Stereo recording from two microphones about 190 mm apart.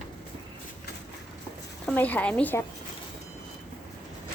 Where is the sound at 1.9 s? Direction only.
10° left (ahead or behind).